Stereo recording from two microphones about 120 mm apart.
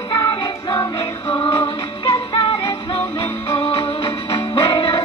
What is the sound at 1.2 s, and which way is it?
Music, 50° left (ahead or behind).